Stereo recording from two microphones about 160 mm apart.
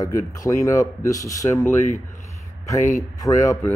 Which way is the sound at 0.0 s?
20° left (ahead or behind).